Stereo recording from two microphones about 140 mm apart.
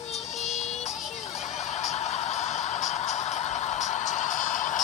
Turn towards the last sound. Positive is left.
turn(degrees=60)  # may be behind; listen again after turning